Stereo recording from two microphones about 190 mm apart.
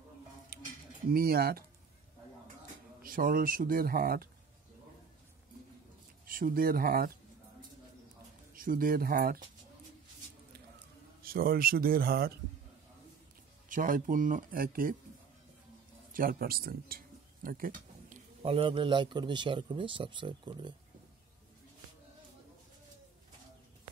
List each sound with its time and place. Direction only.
1.1 s speech: 50° right (ahead or behind)
3.0 s speech: 50° right (ahead or behind)
6.2 s speech: 50° right (ahead or behind)
8.5 s speech: 50° right (ahead or behind)
11.2 s speech: 50° right (ahead or behind)
13.7 s speech: 45° right (ahead or behind)
16.1 s a sound: 50° right (ahead or behind)
18.4 s a man's voice: 30° right (ahead or behind)